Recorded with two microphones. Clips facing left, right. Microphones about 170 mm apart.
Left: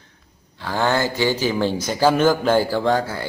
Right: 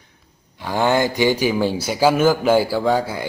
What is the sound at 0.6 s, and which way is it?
A man's voice, 15° right (ahead or behind).